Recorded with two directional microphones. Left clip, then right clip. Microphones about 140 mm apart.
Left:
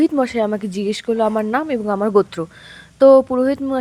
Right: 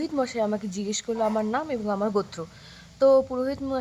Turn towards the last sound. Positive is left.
turn(degrees=40)  # may be behind; listen again after turning